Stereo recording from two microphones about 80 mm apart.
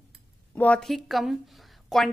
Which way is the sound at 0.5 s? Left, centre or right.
Centre.